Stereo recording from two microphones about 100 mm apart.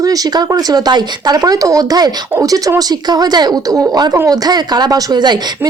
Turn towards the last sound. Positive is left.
turn(degrees=-45)  # may be behind; listen again after turning